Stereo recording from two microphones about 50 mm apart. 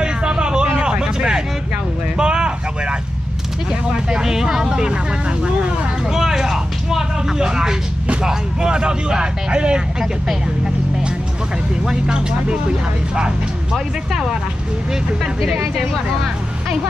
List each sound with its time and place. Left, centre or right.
0.0 s vehicle: centre
3.9 s speech: centre
6.1 s vehicle: centre
8.1 s speech: centre
11.8 s speech: centre